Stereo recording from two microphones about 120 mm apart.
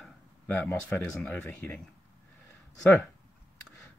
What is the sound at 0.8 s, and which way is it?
Speech, 10° left (ahead or behind).